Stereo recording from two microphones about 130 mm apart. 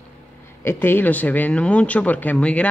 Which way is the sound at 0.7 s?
15° left (ahead or behind).